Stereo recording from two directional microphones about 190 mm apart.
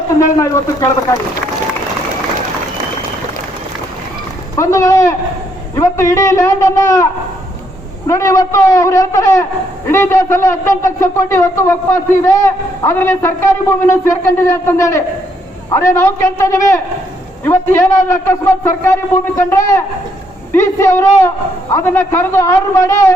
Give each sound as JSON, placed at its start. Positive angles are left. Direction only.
{"t": 0.3, "sound": "a man's voice", "side_deg": 15}
{"t": 4.5, "sound": "a man's voice", "side_deg": 15}